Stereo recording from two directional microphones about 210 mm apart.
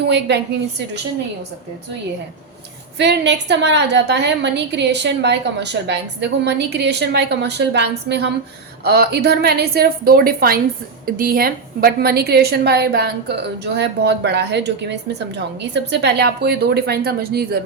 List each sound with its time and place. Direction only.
0.1 s a woman's voice: 55° right (ahead or behind)
3.0 s a woman's voice: 55° right (ahead or behind)